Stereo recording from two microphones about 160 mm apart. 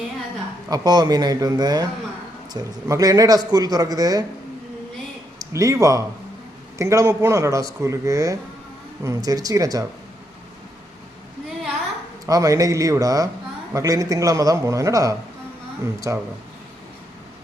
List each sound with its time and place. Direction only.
0.7 s a man's voice: 25° right (ahead or behind)
5.4 s a man's voice: 20° right (ahead or behind)
12.2 s a man's voice: 20° right (ahead or behind)